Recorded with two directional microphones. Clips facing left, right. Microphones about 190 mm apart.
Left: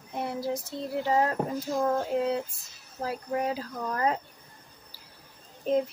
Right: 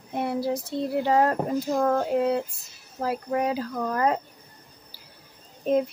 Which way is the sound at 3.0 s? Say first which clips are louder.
Right 4 dB; 75° right (ahead or behind).